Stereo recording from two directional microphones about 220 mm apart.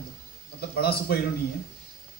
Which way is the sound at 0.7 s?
45° left (ahead or behind).